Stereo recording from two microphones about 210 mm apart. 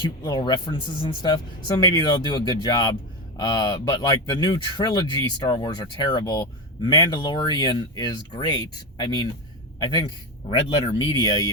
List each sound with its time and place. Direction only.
0.3 s speech: 20° left (ahead or behind)